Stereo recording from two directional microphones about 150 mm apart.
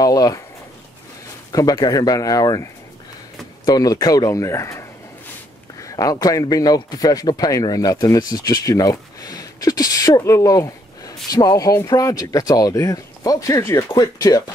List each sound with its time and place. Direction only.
0.0 s speech: 25° left (ahead or behind)
1.5 s speech: 25° left (ahead or behind)